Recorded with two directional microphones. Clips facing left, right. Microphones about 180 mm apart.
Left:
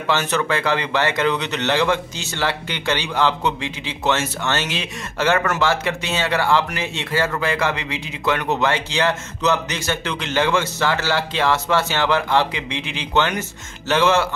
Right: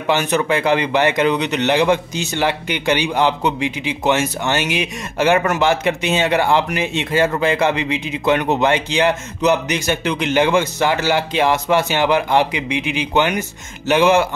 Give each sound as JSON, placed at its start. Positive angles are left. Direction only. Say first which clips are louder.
{"t": 0.0, "sound": "speech", "louder": "right 3 dB", "side_deg": -15}